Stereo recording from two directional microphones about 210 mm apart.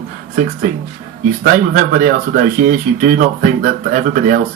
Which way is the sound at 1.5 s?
40° right (ahead or behind).